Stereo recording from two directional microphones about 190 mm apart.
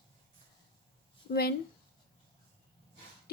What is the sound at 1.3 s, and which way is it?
Speech, 55° left (ahead or behind).